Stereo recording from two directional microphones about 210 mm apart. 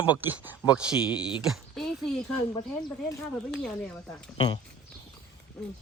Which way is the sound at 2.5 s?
20° left (ahead or behind).